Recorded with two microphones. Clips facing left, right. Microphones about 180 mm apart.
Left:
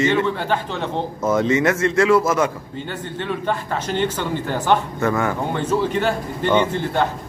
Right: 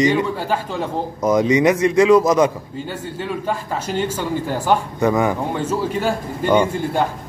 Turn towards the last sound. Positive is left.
turn(degrees=-10)  # may be behind; listen again after turning